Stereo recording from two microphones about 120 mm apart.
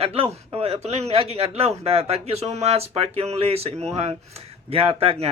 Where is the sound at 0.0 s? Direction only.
55° right (ahead or behind).